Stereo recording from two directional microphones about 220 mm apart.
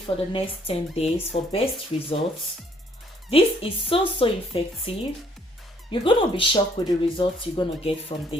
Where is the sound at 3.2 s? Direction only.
25° left (ahead or behind).